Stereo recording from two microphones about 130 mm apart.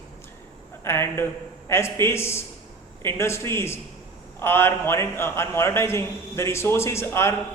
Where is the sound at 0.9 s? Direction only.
20° left (ahead or behind).